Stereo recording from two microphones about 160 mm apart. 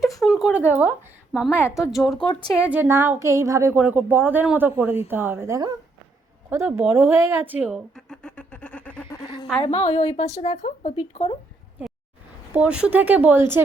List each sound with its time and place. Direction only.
0.0 s speech: centre (ahead or behind)
1.5 s a woman's voice: 15° left (ahead or behind)
1.9 s speech: centre (ahead or behind)
2.1 s a woman's voice: 30° left (ahead or behind)
2.6 s speech: 10° right (ahead or behind)
7.9 s a sound: 5° left (ahead or behind)
9.0 s a sound: 30° left (ahead or behind)
9.6 s speech: 40° left (ahead or behind)
12.5 s speech: 5° right (ahead or behind)